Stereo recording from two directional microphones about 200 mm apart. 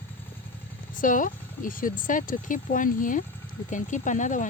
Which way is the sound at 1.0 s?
40° left (ahead or behind).